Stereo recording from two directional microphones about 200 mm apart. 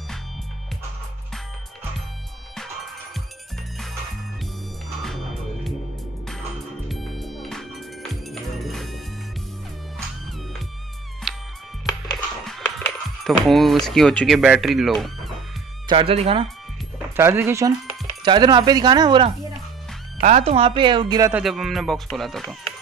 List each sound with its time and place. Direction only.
5.0 s music: centre (ahead or behind)
6.9 s music: centre (ahead or behind)
11.3 s music: centre (ahead or behind)
12.4 s speech: centre (ahead or behind)
15.9 s speech: 30° right (ahead or behind)
17.2 s speech: 10° right (ahead or behind)
20.2 s speech: 35° right (ahead or behind)
21.3 s speech: 5° right (ahead or behind)